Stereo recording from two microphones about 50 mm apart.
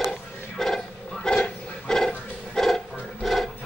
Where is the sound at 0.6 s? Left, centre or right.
Centre.